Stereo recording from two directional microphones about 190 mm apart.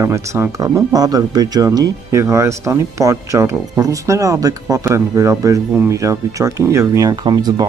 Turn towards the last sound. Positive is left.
turn(degrees=-20)  # may be behind; listen again after turning